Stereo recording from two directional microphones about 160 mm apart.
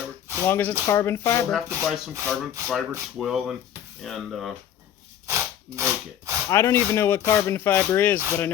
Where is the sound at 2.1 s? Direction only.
20° right (ahead or behind).